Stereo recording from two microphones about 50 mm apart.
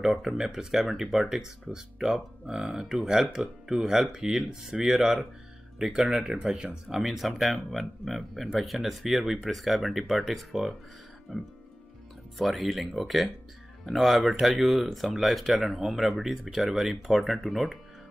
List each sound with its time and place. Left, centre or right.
0.2 s speech: centre
6.5 s speech: centre
6.9 s speech: centre